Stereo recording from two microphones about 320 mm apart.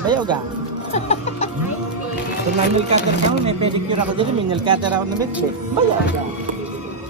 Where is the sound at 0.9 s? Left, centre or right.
Centre.